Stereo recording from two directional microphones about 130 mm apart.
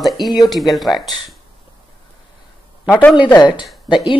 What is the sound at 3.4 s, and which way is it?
Speech, 35° left (ahead or behind).